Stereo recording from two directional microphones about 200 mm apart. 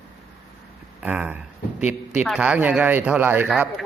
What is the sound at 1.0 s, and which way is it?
A man's voice, 5° right (ahead or behind).